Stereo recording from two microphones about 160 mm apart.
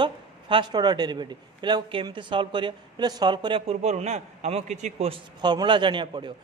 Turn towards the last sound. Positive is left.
turn(degrees=-30)  # may be behind; listen again after turning